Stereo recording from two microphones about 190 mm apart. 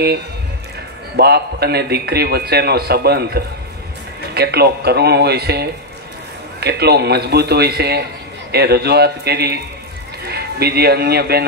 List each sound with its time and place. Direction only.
1.1 s a man's voice: 60° right (ahead or behind)